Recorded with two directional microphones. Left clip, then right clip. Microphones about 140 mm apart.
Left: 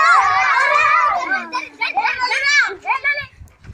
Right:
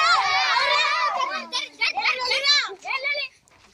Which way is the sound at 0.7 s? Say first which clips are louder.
Left 7 dB; 10° right (ahead or behind).